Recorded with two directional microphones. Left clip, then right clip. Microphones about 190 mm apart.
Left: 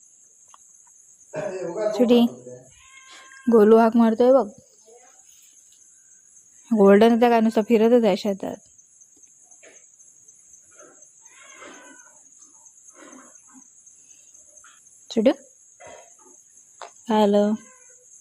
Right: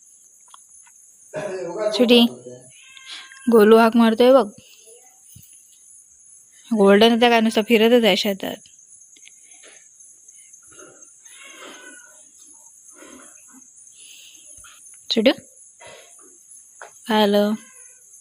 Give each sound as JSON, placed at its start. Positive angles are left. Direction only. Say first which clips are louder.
{"t": 1.9, "sound": "a woman's voice", "louder": "right 4 dB", "side_deg": 5}
{"t": 6.7, "sound": "speech", "louder": "right 1 dB", "side_deg": 15}
{"t": 15.0, "sound": "a sound", "louder": "right 2 dB", "side_deg": 5}
{"t": 16.8, "sound": "speech", "louder": "right 1 dB", "side_deg": 10}